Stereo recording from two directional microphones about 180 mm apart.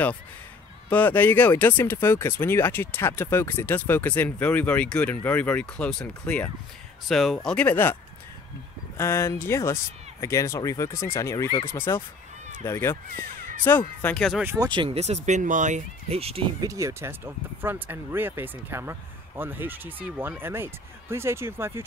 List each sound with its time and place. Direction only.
0.8 s speech: 10° left (ahead or behind)
14.4 s speech: 15° right (ahead or behind)
14.7 s speech: 30° right (ahead or behind)
16.6 s speech: 15° right (ahead or behind)